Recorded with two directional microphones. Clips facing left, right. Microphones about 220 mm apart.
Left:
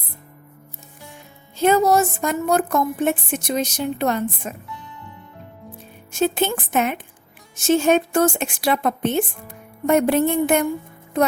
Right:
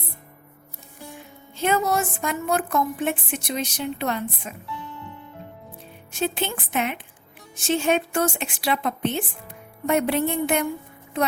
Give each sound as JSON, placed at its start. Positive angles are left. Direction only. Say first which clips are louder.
{"t": 1.5, "sound": "a woman's voice", "louder": "left 6 dB", "side_deg": 40}
{"t": 6.1, "sound": "a woman's voice", "louder": "left 6 dB", "side_deg": 45}